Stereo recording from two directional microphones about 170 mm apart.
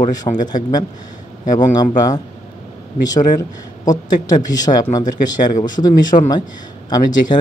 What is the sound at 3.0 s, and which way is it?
Speech, 20° left (ahead or behind).